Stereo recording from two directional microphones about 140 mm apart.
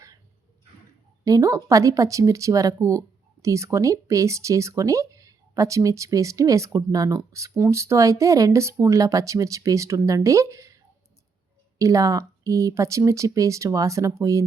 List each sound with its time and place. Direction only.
1.2 s speech: 25° right (ahead or behind)
11.8 s speech: 25° right (ahead or behind)